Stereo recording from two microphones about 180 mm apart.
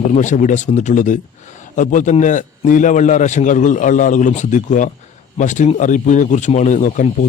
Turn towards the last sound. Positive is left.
turn(degrees=40)  # may be behind; listen again after turning